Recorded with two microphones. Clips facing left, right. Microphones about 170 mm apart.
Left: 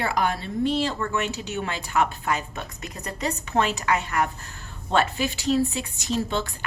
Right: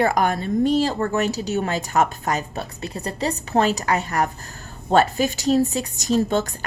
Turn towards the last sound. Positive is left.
turn(degrees=-45)  # may be behind; listen again after turning